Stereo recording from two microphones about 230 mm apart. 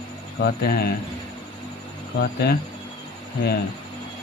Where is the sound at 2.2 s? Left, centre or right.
Left.